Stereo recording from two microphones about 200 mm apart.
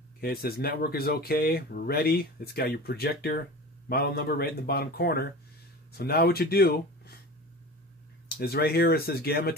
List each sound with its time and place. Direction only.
0.2 s speech: 50° left (ahead or behind)
8.4 s speech: 50° left (ahead or behind)